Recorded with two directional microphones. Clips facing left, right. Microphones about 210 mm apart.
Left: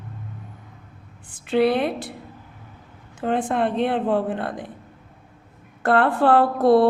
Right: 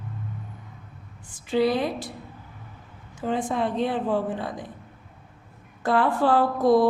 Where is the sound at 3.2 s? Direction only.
60° left (ahead or behind).